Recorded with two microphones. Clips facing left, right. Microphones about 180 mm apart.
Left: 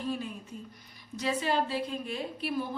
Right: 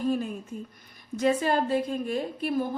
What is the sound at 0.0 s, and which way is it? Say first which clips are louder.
A woman's voice: right 7 dB; 45° right (ahead or behind).